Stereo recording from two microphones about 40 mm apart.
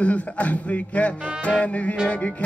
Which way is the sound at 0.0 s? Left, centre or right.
Left.